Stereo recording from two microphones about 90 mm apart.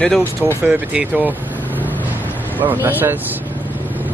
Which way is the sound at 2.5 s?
20° right (ahead or behind).